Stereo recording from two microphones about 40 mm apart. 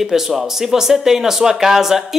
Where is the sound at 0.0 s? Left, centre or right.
Centre.